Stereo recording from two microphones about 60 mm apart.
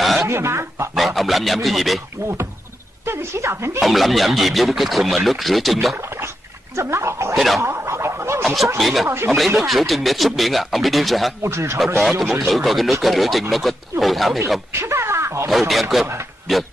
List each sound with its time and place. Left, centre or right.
0.0 s a sound: centre
0.3 s speech: right
0.9 s speech: centre
2.2 s speech: right
3.8 s speech: centre
5.9 s speech: right
7.3 s speech: centre
7.6 s speech: right
8.7 s speech: centre
11.4 s speech: right
12.0 s speech: centre
14.7 s a sound: right
15.7 s speech: centre